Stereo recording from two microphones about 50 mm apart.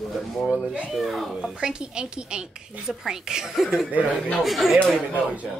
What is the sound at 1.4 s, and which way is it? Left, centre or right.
Speech, centre.